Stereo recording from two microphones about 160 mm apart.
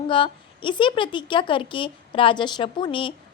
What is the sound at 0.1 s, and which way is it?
A woman's voice, 30° left (ahead or behind).